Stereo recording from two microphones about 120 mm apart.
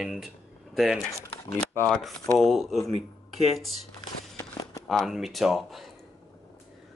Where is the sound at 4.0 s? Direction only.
35° left (ahead or behind).